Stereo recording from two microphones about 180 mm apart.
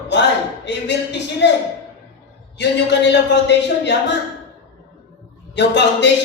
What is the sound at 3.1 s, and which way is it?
Speech, 75° left (ahead or behind).